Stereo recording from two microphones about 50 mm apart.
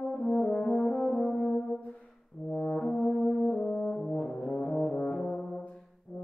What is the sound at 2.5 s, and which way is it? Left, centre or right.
Brass instrument, centre.